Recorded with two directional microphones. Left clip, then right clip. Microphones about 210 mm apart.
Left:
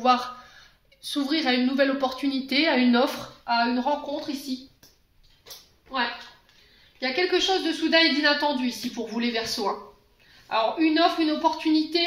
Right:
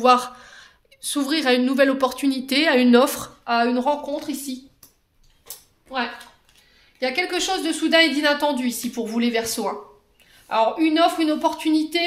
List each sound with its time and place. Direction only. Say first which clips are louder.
0.0 s speech: right 5 dB; 55° right (ahead or behind)
7.0 s a woman's voice: right 1 dB; 55° right (ahead or behind)